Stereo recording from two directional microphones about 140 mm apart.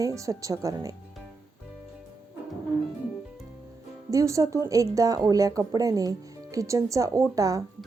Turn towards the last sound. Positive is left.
turn(degrees=-25)  # may be behind; listen again after turning